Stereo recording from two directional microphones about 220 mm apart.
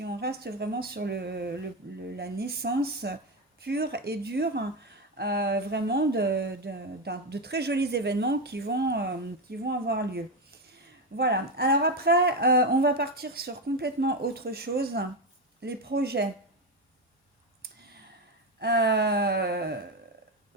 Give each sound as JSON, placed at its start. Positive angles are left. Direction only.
{"t": 0.0, "sound": "speech", "side_deg": -45}
{"t": 18.6, "sound": "speech", "side_deg": -50}